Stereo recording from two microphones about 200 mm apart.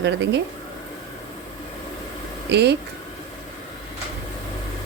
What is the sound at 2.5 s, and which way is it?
Speech, 55° right (ahead or behind).